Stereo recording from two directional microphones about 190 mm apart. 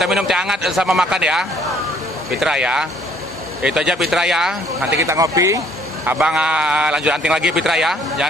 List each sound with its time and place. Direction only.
0.0 s a man's voice: 5° right (ahead or behind)
4.9 s a man's voice: 15° right (ahead or behind)
6.0 s a man's voice: 5° right (ahead or behind)